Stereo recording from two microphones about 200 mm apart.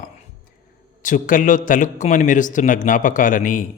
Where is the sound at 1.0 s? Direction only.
40° left (ahead or behind).